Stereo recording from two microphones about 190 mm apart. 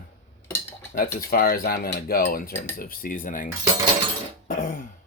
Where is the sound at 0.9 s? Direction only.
50° left (ahead or behind).